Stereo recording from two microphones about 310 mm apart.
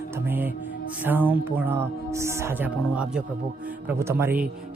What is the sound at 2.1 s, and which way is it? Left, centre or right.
Speech, centre.